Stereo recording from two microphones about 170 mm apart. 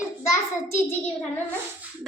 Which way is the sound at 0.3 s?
15° left (ahead or behind).